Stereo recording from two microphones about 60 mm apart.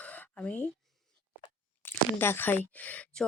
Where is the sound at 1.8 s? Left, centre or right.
Left.